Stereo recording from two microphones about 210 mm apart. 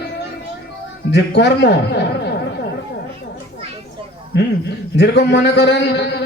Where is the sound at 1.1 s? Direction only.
55° left (ahead or behind).